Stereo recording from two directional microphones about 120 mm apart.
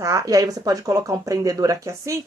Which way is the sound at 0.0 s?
30° right (ahead or behind).